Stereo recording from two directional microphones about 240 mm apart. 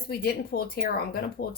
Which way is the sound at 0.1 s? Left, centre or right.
Left.